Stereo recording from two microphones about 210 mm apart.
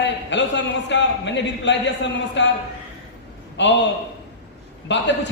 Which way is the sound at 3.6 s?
55° left (ahead or behind).